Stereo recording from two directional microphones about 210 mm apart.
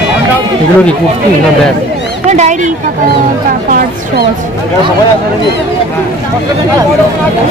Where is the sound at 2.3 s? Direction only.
35° right (ahead or behind).